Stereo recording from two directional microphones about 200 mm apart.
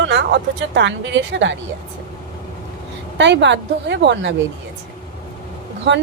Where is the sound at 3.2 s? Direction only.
60° right (ahead or behind).